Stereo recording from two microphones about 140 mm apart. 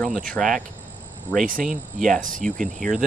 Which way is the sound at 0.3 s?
5° left (ahead or behind).